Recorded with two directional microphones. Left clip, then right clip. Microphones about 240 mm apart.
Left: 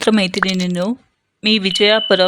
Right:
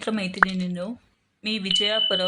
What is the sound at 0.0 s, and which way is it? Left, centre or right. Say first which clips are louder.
Speech: left 7 dB; left.